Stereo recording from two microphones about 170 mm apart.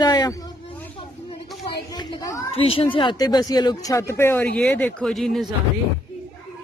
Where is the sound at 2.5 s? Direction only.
35° left (ahead or behind); by 5.5 s centre (ahead or behind).